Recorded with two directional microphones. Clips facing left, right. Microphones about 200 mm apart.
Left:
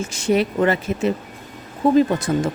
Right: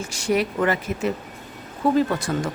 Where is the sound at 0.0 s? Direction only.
25° left (ahead or behind).